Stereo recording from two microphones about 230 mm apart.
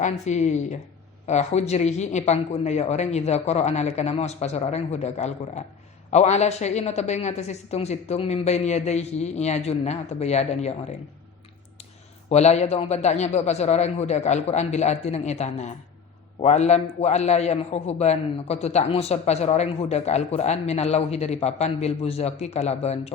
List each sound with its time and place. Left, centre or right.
0.0 s a woman's voice: left
12.3 s a man's voice: left